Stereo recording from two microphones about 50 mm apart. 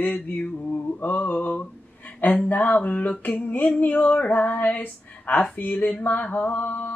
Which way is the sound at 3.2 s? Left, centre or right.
Left.